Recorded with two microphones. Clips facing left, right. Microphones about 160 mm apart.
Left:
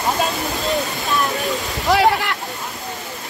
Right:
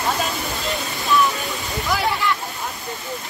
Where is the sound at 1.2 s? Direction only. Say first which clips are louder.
Left 3 dB; 75° left (ahead or behind).